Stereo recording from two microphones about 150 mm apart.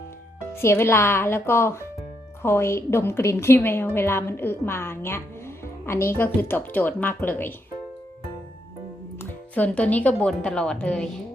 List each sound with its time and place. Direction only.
0.5 s a woman's voice: 15° left (ahead or behind)
9.6 s a woman's voice: 10° left (ahead or behind)